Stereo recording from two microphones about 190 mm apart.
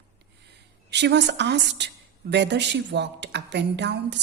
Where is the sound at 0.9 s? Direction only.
65° right (ahead or behind).